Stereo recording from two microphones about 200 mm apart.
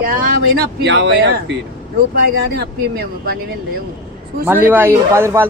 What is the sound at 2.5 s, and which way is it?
Speech, 50° right (ahead or behind).